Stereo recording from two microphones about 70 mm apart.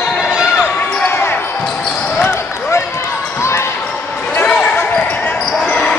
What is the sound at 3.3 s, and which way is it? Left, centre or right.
Basketball bounce, left.